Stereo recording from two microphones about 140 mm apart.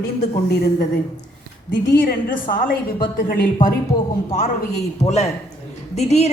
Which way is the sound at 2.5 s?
85° left.